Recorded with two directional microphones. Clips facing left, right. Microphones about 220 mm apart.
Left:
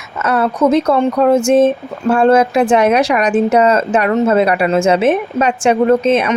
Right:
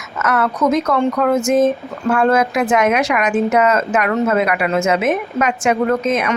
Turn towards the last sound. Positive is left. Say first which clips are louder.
# left 5 dB
turn(degrees=30)  # may be behind; listen again after turning